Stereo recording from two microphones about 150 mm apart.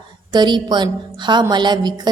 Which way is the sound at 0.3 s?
30° right (ahead or behind).